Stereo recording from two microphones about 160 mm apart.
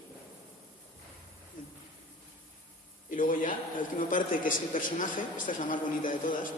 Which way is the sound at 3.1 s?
55° left (ahead or behind).